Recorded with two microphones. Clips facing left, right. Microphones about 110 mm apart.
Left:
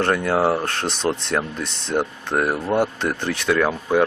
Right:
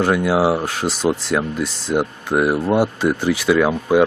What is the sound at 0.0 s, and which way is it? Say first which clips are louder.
Speech: right 3 dB; 5° right (ahead or behind).